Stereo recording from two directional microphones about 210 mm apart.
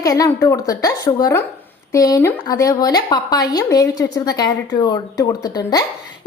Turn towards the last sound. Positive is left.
turn(degrees=15)  # may be behind; listen again after turning